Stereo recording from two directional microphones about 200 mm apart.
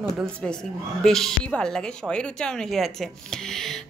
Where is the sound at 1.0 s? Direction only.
Centre (ahead or behind).